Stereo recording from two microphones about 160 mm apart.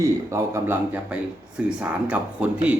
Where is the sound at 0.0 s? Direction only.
20° right (ahead or behind).